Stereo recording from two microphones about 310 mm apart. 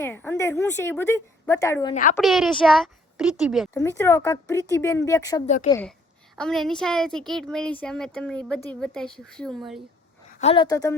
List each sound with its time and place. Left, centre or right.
0.0 s a woman's voice: centre
2.2 s a woman's voice: centre
3.8 s a woman's voice: centre
5.5 s a woman's voice: left
6.3 s a woman's voice: centre
10.4 s a woman's voice: centre